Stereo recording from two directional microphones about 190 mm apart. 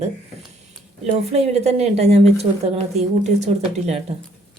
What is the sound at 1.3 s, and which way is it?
Speech, 35° right (ahead or behind).